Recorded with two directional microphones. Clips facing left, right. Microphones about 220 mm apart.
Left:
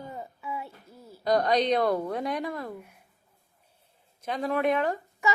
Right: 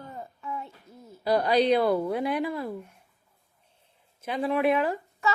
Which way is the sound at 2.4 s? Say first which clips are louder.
Right 4 dB; 30° right (ahead or behind).